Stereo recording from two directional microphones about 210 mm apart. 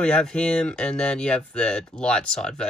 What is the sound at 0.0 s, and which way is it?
Speech, 5° left (ahead or behind).